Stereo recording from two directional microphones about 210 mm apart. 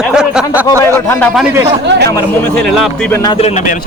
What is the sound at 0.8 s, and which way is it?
Speech, 10° left (ahead or behind).